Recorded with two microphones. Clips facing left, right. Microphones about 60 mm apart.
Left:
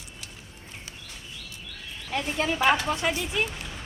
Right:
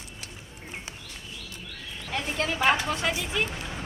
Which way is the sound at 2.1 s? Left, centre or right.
Centre.